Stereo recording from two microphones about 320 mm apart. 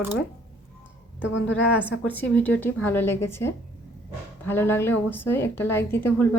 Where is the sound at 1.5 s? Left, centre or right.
Centre.